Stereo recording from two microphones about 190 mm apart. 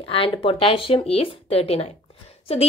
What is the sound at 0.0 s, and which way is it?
A woman's voice, 30° left (ahead or behind).